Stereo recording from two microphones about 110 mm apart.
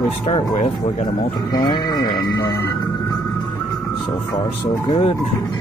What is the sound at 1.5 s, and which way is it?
Speech, 40° left (ahead or behind).